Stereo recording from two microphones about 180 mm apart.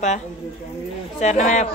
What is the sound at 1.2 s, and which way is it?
Speech, 40° left (ahead or behind).